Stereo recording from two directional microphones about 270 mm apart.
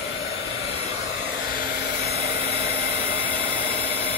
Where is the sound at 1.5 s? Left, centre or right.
Left.